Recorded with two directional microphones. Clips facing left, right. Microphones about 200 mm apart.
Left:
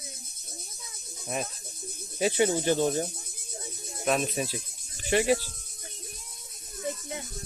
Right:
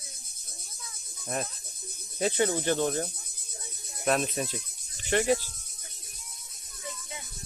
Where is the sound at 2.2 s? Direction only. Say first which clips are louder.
Left 2 dB; 15° left (ahead or behind).